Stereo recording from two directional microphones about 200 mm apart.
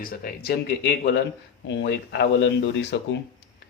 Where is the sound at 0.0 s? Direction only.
45° left (ahead or behind).